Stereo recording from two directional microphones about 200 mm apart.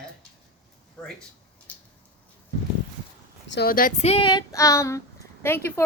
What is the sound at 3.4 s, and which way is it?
Speech, 55° left (ahead or behind).